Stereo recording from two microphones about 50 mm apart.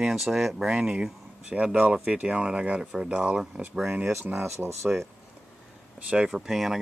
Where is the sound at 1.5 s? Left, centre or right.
Right.